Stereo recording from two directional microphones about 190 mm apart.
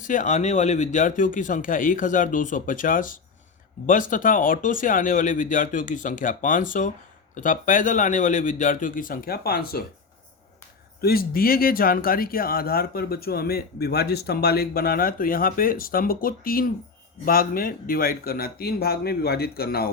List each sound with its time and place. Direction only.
0.0 s speech: 45° left (ahead or behind)
11.0 s speech: 50° left (ahead or behind)